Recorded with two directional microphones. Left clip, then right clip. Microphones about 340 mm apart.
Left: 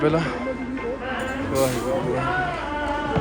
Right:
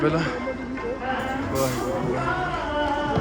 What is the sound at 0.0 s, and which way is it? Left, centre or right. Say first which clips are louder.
Mantra: left 2 dB; centre.